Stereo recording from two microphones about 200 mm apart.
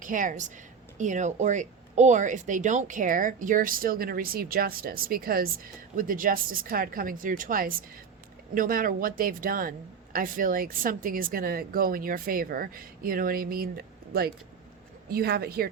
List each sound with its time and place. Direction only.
0.0 s speech: 40° right (ahead or behind)